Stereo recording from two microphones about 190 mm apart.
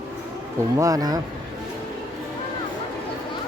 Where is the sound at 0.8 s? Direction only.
20° right (ahead or behind).